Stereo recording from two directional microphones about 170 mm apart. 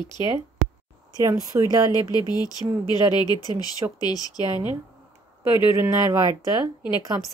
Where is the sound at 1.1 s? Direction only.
20° right (ahead or behind).